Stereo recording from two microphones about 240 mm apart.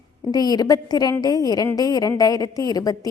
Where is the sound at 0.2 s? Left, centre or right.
Centre.